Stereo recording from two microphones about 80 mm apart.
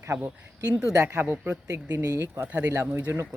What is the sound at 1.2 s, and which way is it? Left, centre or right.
Speech, right.